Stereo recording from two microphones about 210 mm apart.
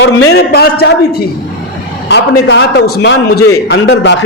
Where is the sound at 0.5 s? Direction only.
50° left (ahead or behind).